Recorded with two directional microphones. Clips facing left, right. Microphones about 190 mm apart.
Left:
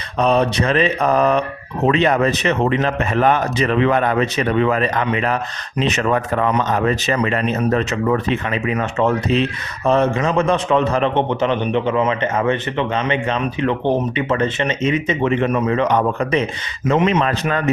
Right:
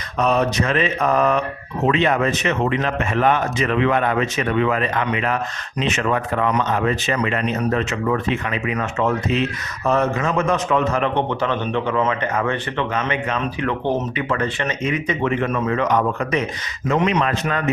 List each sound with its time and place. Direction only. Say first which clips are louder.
0.2 s a man's voice: left 2 dB; 30° left (ahead or behind)